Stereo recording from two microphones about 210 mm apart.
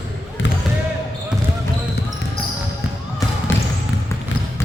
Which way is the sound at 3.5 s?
65° left (ahead or behind).